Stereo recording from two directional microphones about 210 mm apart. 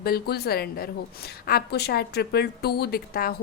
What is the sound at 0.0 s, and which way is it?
A woman's voice, 45° left (ahead or behind).